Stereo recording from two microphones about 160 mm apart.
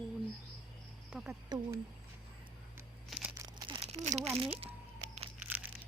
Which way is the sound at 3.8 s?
45° right (ahead or behind).